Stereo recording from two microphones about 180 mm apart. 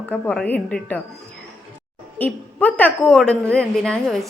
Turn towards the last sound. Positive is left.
turn(degrees=5)  # may be behind; listen again after turning